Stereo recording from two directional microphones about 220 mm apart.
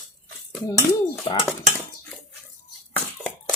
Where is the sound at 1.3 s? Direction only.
20° left (ahead or behind).